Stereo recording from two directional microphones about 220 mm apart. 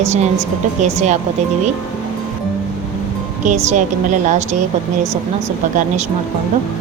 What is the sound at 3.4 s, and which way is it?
Speech, 35° right (ahead or behind).